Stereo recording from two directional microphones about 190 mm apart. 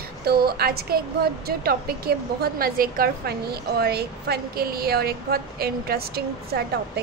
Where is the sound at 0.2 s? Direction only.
55° right (ahead or behind).